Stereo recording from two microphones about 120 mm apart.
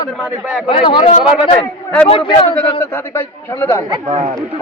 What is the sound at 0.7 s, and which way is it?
A man's voice, 45° left (ahead or behind).